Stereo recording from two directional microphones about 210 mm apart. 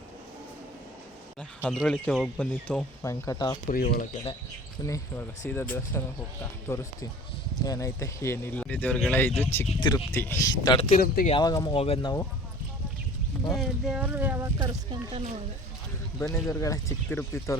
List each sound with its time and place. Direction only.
1.4 s speech: 5° left (ahead or behind); by 3.6 s 20° left (ahead or behind)
3.7 s speech: 45° left (ahead or behind)
4.8 s speech: 15° left (ahead or behind)
9.8 s speech: 20° left (ahead or behind)
10.8 s speech: 40° left (ahead or behind)
11.3 s speech: 20° left (ahead or behind)
13.5 s speech: centre (ahead or behind)
16.1 s speech: 15° left (ahead or behind)